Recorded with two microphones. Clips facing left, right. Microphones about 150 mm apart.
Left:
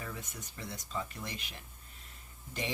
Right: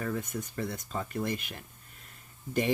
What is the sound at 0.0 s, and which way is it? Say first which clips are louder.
Speech: right 10 dB; 55° right (ahead or behind).